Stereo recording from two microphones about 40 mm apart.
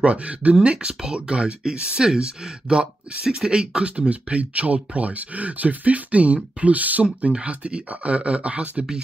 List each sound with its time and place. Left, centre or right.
0.0 s speech: right